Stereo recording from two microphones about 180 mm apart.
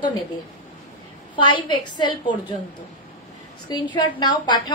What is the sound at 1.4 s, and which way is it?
Speech, 25° left (ahead or behind).